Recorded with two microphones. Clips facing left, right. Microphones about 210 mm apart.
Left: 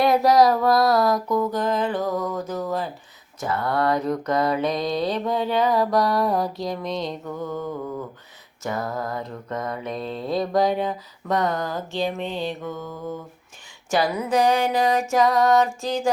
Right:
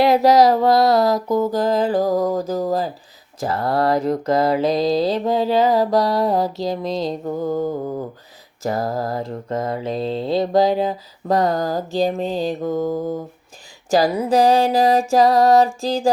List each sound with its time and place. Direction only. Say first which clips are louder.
0.0 s mantra: right 3 dB; 25° right (ahead or behind)